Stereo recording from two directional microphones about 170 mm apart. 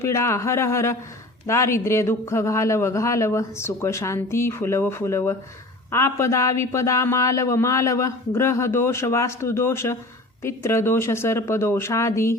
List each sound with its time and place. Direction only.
0.0 s a man's voice: 15° left (ahead or behind)